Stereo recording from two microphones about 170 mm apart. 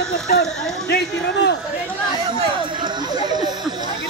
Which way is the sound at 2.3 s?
25° right (ahead or behind).